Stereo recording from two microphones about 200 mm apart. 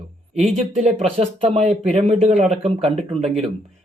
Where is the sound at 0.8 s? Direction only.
30° right (ahead or behind).